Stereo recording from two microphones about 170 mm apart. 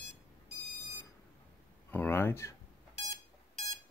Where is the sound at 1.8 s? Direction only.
10° left (ahead or behind).